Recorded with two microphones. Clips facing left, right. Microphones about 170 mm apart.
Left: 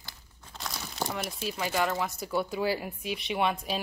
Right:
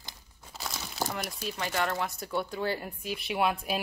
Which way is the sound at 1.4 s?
5° left (ahead or behind).